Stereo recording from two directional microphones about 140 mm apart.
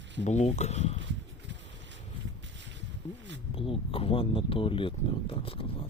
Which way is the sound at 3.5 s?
40° left (ahead or behind).